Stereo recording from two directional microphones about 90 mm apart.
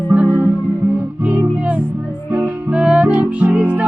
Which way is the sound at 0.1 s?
15° right (ahead or behind).